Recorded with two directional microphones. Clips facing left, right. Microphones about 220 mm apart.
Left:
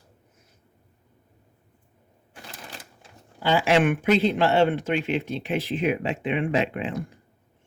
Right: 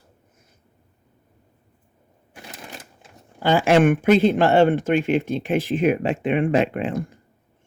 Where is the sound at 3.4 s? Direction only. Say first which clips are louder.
Right 4 dB; 50° right (ahead or behind).